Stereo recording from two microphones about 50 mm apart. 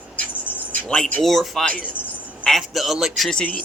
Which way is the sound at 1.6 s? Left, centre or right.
Left.